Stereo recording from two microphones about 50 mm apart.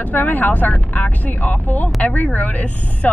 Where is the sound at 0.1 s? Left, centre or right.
Left.